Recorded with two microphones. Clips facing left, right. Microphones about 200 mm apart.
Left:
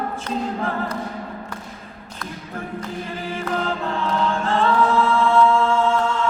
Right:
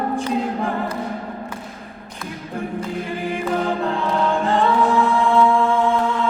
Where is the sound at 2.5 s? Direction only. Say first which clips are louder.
Right 4 dB; 15° right (ahead or behind).